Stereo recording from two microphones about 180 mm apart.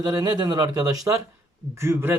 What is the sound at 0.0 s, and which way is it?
Speech, 20° right (ahead or behind).